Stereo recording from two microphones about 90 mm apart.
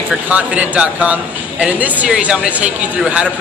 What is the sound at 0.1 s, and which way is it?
Speech, 15° right (ahead or behind).